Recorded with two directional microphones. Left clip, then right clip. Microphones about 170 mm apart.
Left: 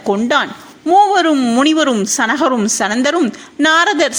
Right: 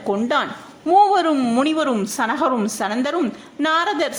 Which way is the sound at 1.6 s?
20° left (ahead or behind).